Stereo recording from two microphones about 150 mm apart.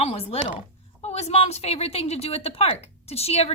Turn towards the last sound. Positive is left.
turn(degrees=45)  # may be behind; listen again after turning